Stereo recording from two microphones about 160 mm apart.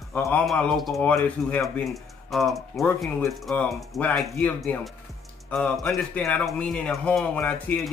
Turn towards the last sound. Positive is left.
turn(degrees=10)  # may be behind; listen again after turning